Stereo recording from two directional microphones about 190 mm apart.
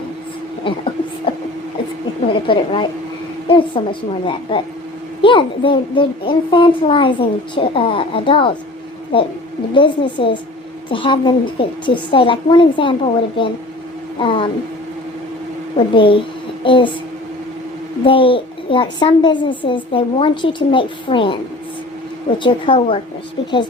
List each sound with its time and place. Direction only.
0.6 s a sound: 25° left (ahead or behind)
2.2 s a child's voice: 25° left (ahead or behind)
16.0 s a child's voice: 25° left (ahead or behind)
18.0 s a child's voice: 30° left (ahead or behind)
22.4 s a child's voice: 25° left (ahead or behind)